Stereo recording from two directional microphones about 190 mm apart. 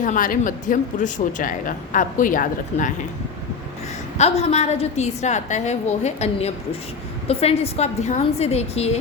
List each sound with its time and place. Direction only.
0.0 s speech: 45° left (ahead or behind)
4.2 s a woman's voice: 35° left (ahead or behind)